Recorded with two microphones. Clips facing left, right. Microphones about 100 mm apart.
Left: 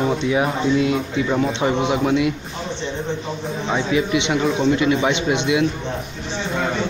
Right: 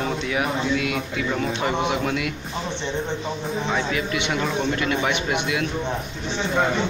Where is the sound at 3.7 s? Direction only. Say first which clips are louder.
Left 7 dB; 20° left (ahead or behind).